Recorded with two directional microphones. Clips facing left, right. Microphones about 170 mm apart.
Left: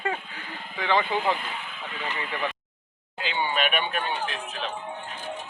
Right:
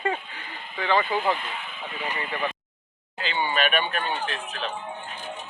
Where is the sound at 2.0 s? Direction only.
10° right (ahead or behind).